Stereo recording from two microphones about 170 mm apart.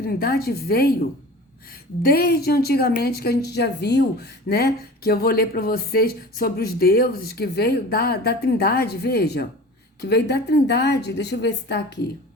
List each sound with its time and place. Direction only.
0.0 s a woman's voice: 60° left (ahead or behind)
2.0 s a woman's voice: 60° left (ahead or behind); by 11.8 s 85° left